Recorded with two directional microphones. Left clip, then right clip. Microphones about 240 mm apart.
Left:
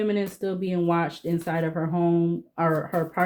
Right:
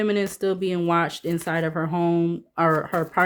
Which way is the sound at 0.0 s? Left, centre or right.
Right.